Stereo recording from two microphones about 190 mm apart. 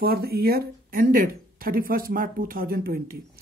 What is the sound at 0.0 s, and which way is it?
Speech, 55° right (ahead or behind).